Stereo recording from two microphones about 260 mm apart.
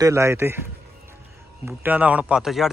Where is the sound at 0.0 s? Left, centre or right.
Centre.